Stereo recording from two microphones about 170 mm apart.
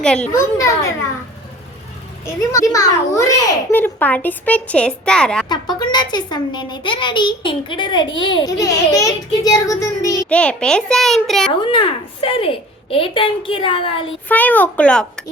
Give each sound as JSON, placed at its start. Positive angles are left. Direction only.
{"t": 0.0, "sound": "a child's voice", "side_deg": 5}
{"t": 0.3, "sound": "speech", "side_deg": 20}
{"t": 2.2, "sound": "a child's voice", "side_deg": 15}
{"t": 5.5, "sound": "a child's voice", "side_deg": 25}
{"t": 10.2, "sound": "a child's voice", "side_deg": 5}
{"t": 11.6, "sound": "a woman's voice", "side_deg": 30}
{"t": 14.3, "sound": "speech", "side_deg": 10}